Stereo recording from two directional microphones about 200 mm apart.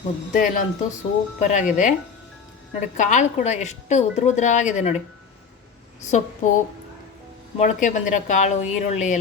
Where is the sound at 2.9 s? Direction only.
40° left (ahead or behind).